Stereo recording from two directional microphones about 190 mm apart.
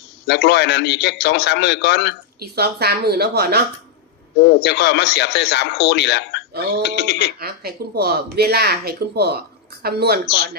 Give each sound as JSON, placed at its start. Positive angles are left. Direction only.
{"t": 0.3, "sound": "speech", "side_deg": 60}
{"t": 2.4, "sound": "speech", "side_deg": -55}
{"t": 4.4, "sound": "speech", "side_deg": 60}
{"t": 7.3, "sound": "speech", "side_deg": -55}